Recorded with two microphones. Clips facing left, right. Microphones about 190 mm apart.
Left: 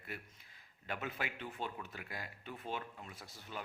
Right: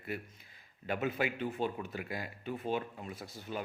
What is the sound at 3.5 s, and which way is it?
Speech, 15° right (ahead or behind).